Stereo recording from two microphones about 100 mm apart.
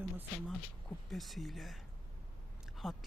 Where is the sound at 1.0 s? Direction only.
Centre (ahead or behind).